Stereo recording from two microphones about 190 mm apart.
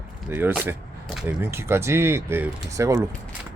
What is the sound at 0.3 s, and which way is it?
Speech, 10° right (ahead or behind).